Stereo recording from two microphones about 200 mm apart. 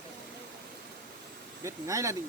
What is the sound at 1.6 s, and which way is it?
Speech, 15° right (ahead or behind).